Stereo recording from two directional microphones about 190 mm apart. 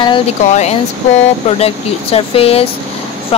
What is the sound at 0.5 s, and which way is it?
Speech, 35° left (ahead or behind).